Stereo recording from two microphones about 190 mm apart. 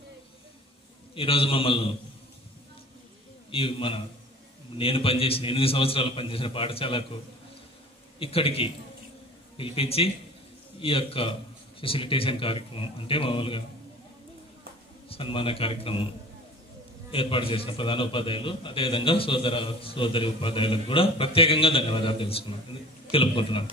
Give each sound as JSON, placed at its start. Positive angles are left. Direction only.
{"t": 1.1, "sound": "a man's voice", "side_deg": 30}
{"t": 3.5, "sound": "a man's voice", "side_deg": 30}
{"t": 8.2, "sound": "a man's voice", "side_deg": 30}
{"t": 15.0, "sound": "a man's voice", "side_deg": 30}
{"t": 17.1, "sound": "a man's voice", "side_deg": 30}